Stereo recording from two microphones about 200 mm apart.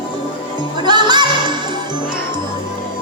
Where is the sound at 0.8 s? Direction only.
20° right (ahead or behind).